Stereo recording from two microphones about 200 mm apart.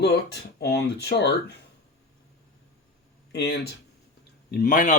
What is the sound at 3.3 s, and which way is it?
Speech, 55° left (ahead or behind).